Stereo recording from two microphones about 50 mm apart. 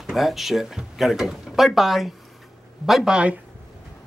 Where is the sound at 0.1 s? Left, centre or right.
Centre.